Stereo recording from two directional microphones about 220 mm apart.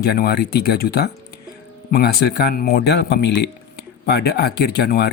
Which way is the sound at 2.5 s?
40° left (ahead or behind).